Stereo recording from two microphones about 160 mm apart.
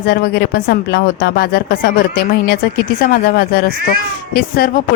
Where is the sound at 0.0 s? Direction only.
80° left.